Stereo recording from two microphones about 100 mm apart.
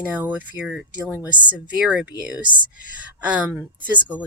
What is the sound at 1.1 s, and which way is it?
Speech, 15° right (ahead or behind).